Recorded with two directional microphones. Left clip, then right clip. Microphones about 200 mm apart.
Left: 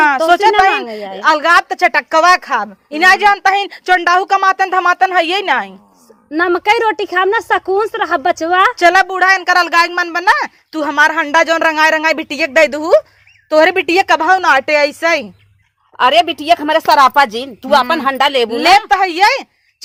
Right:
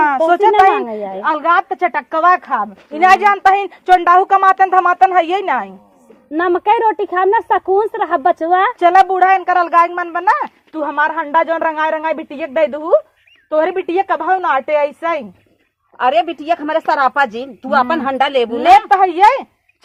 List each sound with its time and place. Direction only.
0.0 s a woman's voice: 35° left (ahead or behind)
6.3 s a woman's voice: 15° left (ahead or behind)
8.4 s a woman's voice: 30° left (ahead or behind)
8.8 s speech: 45° left (ahead or behind)
16.0 s a woman's voice: 70° left (ahead or behind)
18.8 s speech: 50° left (ahead or behind)